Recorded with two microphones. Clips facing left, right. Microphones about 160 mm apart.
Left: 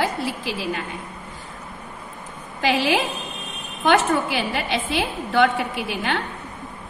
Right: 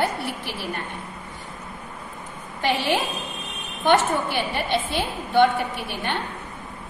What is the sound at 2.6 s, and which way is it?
A woman's voice, 90° left.